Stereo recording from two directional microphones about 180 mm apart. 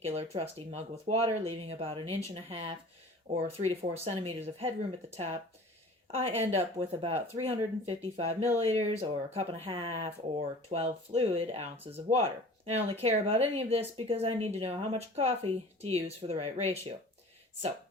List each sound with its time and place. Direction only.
0.0 s speech: 35° right (ahead or behind)
6.1 s speech: 35° right (ahead or behind)